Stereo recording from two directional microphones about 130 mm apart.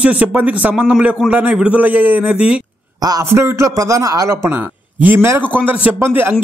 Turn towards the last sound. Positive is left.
turn(degrees=-15)  # may be behind; listen again after turning